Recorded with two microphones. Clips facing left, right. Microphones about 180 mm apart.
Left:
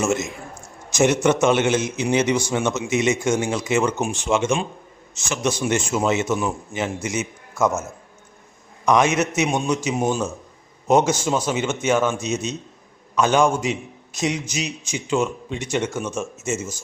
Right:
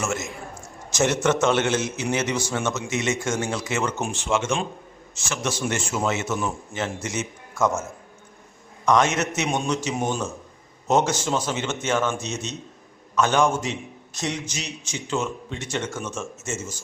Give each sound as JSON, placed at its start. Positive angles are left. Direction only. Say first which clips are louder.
{"t": 0.0, "sound": "a man's voice", "louder": "left 6 dB", "side_deg": 20}
{"t": 8.9, "sound": "a man's voice", "louder": "left 2 dB", "side_deg": 10}